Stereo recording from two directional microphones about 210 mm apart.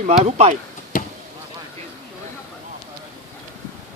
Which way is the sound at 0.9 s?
40° left (ahead or behind).